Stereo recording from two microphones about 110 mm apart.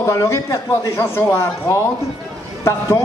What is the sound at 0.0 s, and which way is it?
A man's voice, 25° left (ahead or behind).